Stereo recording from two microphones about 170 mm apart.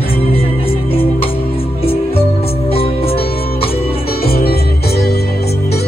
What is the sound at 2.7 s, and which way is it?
Music, 35° left (ahead or behind).